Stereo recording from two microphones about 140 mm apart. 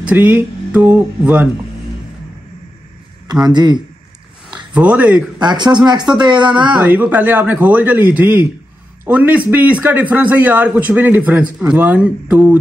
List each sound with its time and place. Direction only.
0.0 s a man's voice: 10° right (ahead or behind)
3.3 s speech: 30° right (ahead or behind)
4.7 s a man's voice: 10° right (ahead or behind)
5.4 s speech: 30° right (ahead or behind)
6.8 s a man's voice: 10° right (ahead or behind)